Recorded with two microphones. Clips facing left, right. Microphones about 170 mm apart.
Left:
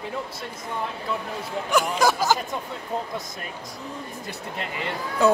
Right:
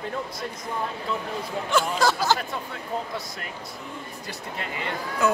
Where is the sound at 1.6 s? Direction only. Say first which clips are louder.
Left 2 dB; 15° left (ahead or behind).